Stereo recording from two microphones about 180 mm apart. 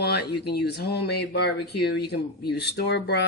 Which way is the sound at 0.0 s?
65° left (ahead or behind).